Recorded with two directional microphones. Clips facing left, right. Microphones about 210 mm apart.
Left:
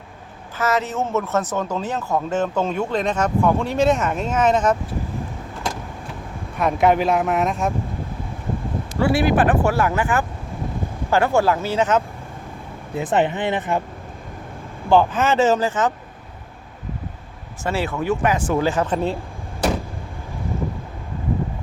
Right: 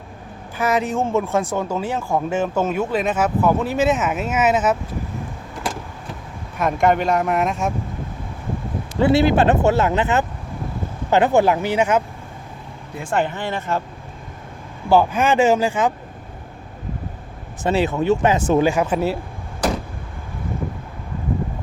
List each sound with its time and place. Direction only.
0.6 s speech: 15° right (ahead or behind)
6.6 s speech: centre (ahead or behind)
9.0 s speech: 25° right (ahead or behind)
13.0 s speech: 20° left (ahead or behind)
14.8 s speech: 10° right (ahead or behind)
17.6 s speech: 20° right (ahead or behind)